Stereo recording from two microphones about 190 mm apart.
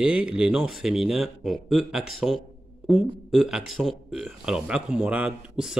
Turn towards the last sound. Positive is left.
turn(degrees=-5)  # may be behind; listen again after turning